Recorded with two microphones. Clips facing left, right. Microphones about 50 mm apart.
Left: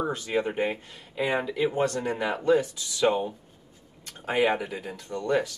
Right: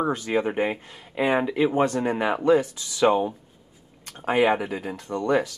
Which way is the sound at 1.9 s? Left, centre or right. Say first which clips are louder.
Right 4 dB; centre.